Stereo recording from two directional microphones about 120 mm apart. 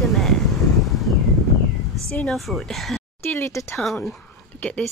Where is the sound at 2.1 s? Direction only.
5° left (ahead or behind).